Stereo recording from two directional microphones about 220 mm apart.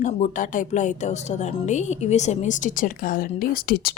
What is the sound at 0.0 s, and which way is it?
A woman's voice, 35° left (ahead or behind).